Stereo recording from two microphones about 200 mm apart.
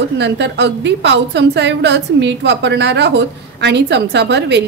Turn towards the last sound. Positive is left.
turn(degrees=-60)  # may be behind; listen again after turning